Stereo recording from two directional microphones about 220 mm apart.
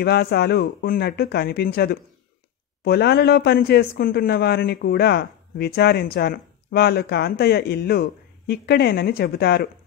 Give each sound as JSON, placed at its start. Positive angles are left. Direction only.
{"t": 0.0, "sound": "speech", "side_deg": 45}